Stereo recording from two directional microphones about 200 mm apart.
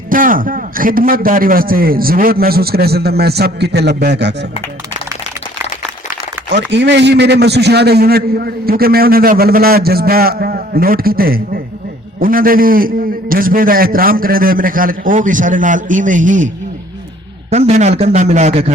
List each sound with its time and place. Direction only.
0.1 s a man's voice: 45° right (ahead or behind); by 4.4 s 60° right (ahead or behind)
6.5 s a man's voice: 60° right (ahead or behind); by 16.5 s 40° right (ahead or behind)
17.5 s a man's voice: 35° right (ahead or behind)